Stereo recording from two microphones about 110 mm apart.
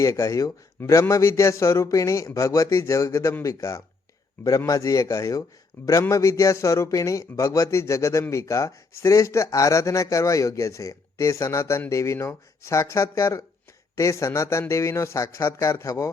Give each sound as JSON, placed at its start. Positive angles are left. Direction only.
{"t": 0.0, "sound": "speech", "side_deg": 30}